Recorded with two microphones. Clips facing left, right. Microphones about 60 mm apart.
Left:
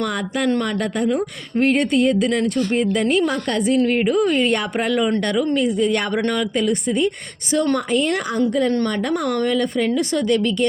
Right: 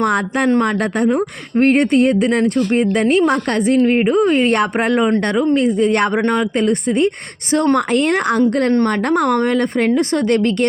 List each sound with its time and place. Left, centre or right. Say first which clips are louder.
0.0 s a woman's voice: right 5 dB; right
3.8 s a woman's voice: right 4 dB; right
6.2 s speech: right 4 dB; right
7.5 s a woman's voice: right 4 dB; right